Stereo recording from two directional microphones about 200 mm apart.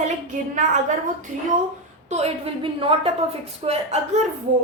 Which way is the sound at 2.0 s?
35° right (ahead or behind).